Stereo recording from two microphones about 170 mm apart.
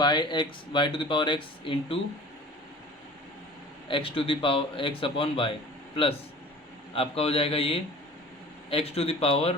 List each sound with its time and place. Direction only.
0.0 s speech: 25° left (ahead or behind)
3.8 s a man's voice: 30° left (ahead or behind)
6.9 s a man's voice: 35° left (ahead or behind)